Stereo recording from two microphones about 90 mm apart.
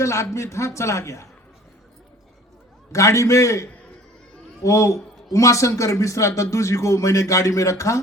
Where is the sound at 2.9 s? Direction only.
35° left (ahead or behind).